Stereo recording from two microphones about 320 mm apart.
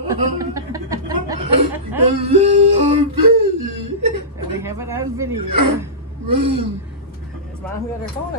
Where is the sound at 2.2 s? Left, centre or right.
Centre.